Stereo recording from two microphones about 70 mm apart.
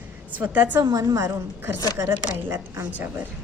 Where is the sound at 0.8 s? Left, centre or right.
Right.